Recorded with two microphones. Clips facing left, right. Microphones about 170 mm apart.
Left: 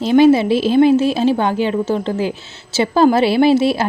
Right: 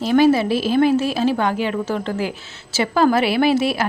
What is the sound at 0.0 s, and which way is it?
A woman's voice, 25° left (ahead or behind).